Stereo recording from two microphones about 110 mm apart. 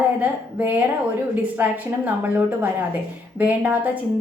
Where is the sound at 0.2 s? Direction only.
15° right (ahead or behind).